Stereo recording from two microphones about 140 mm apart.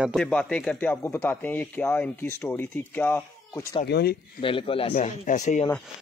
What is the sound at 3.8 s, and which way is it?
Speech, 90° left.